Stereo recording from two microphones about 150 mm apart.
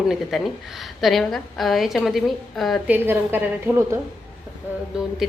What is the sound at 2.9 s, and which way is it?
Speech, 15° right (ahead or behind).